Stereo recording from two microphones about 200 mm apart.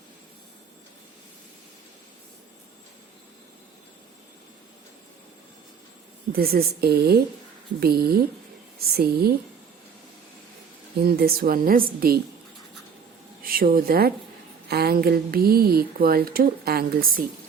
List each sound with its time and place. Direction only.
6.3 s speech: 50° right (ahead or behind)
11.0 s speech: 50° right (ahead or behind)
13.4 s a woman's voice: 45° right (ahead or behind)